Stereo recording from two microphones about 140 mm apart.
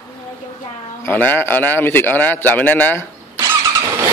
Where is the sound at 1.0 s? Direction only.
15° left (ahead or behind).